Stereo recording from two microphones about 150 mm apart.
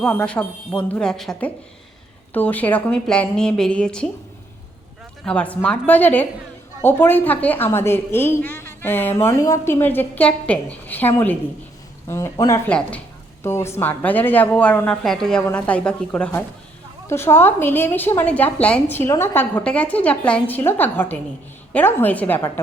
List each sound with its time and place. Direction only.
0.0 s a woman's voice: 5° left (ahead or behind)
5.2 s a woman's voice: 10° left (ahead or behind)
12.6 s a woman's voice: 10° left (ahead or behind)